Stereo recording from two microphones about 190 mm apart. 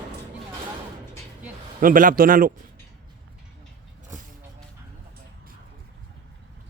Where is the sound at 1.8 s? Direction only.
45° right (ahead or behind).